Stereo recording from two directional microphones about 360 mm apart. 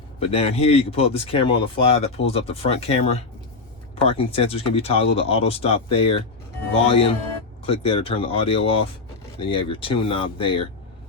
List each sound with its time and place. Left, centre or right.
0.2 s speech: centre